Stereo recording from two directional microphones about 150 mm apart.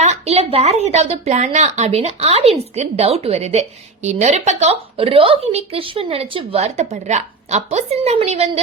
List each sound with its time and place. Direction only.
0.0 s a woman's voice: 45° right (ahead or behind)